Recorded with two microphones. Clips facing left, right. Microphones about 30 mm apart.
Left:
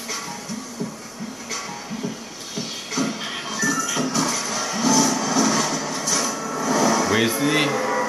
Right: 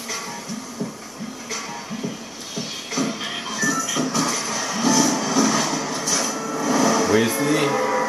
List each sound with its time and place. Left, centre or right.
2.5 s music: centre
7.1 s a sound: centre
7.7 s music: centre